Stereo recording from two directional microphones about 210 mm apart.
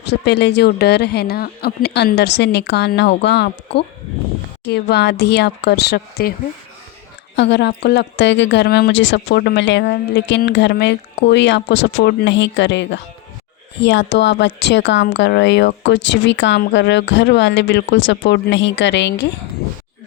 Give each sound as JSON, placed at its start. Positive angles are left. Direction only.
{"t": 0.0, "sound": "speech", "side_deg": 50}
{"t": 7.3, "sound": "speech", "side_deg": 55}